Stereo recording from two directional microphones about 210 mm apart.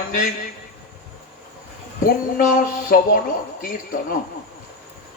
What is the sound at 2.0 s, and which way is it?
Speech, 40° left (ahead or behind).